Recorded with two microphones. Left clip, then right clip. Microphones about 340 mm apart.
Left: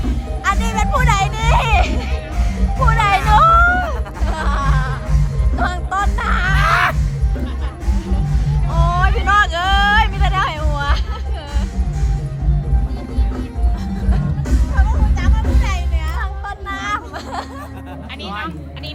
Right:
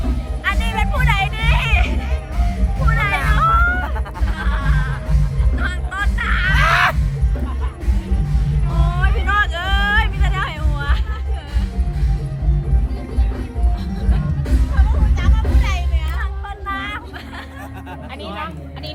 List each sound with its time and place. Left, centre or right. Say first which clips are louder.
0.4 s music: left 3 dB; centre
6.5 s a sound: right 1 dB; centre
9.0 s music: left 4 dB; centre
15.2 s music: even; left
16.6 s hubbub: left 2 dB; centre